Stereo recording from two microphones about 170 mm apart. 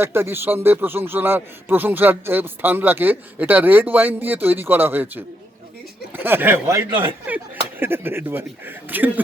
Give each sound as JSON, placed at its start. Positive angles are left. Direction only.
{"t": 0.0, "sound": "a man's voice", "side_deg": -15}
{"t": 6.9, "sound": "speech", "side_deg": -30}
{"t": 7.3, "sound": "a man's voice", "side_deg": -10}